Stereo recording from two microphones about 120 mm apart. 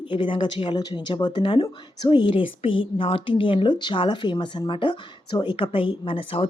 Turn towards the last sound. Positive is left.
turn(degrees=50)  # may be behind; listen again after turning